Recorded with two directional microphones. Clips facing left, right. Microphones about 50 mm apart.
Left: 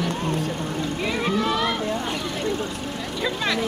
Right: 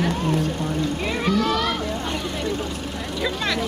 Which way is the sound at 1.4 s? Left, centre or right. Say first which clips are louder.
Right 1 dB; left.